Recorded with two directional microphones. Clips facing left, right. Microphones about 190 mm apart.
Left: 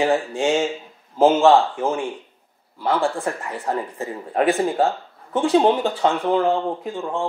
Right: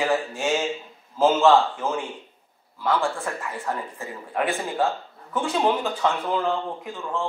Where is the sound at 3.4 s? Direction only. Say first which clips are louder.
Left 4 dB; 35° left (ahead or behind).